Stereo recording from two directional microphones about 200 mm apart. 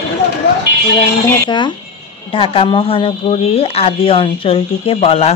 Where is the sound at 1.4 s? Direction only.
20° left (ahead or behind).